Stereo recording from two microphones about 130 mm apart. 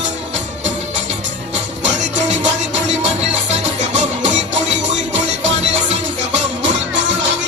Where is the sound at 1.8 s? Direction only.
65° right (ahead or behind).